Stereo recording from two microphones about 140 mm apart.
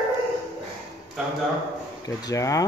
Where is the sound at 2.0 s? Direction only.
25° left (ahead or behind).